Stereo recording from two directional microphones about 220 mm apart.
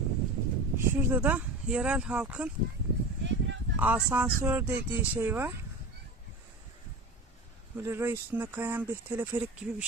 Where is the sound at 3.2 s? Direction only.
55° right (ahead or behind).